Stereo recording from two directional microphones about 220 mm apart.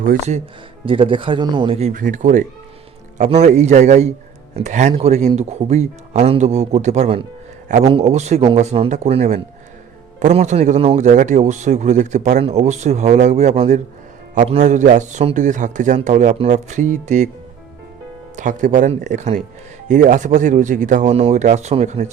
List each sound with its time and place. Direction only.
0.0 s speech: 35° right (ahead or behind)
0.9 s speech: 25° right (ahead or behind)
18.3 s speech: 35° right (ahead or behind)